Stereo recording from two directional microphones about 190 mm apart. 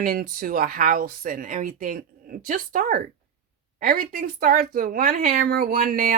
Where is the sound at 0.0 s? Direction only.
50° right (ahead or behind).